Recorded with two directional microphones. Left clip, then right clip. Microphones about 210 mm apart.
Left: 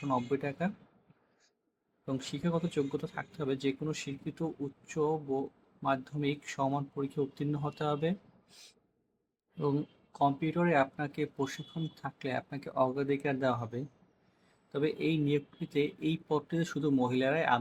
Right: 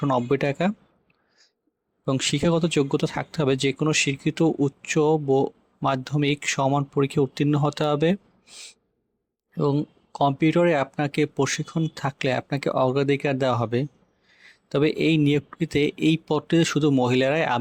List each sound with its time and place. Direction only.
0.1 s speech: 40° right (ahead or behind)
2.0 s speech: 40° right (ahead or behind)